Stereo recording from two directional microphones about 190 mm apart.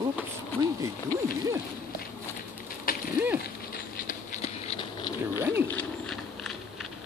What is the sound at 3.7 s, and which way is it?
Patter, 40° left (ahead or behind).